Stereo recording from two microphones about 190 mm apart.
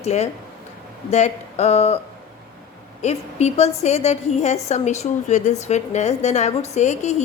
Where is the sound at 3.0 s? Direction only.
35° left (ahead or behind).